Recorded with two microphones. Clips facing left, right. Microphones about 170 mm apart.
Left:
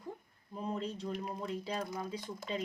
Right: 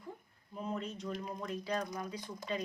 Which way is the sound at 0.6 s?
35° left (ahead or behind).